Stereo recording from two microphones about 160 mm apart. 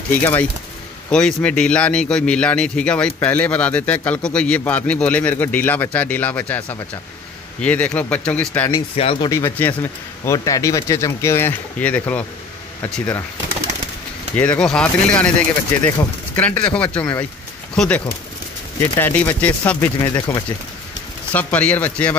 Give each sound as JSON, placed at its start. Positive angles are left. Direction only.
{"t": 0.1, "sound": "a man's voice", "side_deg": 10}
{"t": 8.9, "sound": "speech", "side_deg": 35}
{"t": 9.3, "sound": "a man's voice", "side_deg": 15}
{"t": 14.3, "sound": "a man's voice", "side_deg": 10}
{"t": 20.0, "sound": "speech", "side_deg": 20}
{"t": 21.3, "sound": "a man's voice", "side_deg": 10}